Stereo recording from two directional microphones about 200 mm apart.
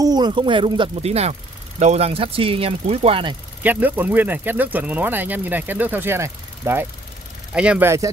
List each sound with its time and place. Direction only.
0.0 s speech: 20° right (ahead or behind)
3.6 s speech: 10° right (ahead or behind)